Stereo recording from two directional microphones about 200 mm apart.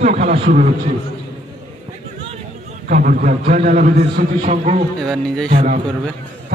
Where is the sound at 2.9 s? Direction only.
45° right (ahead or behind).